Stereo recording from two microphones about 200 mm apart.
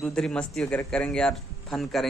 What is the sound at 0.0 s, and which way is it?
Speech, 5° left (ahead or behind).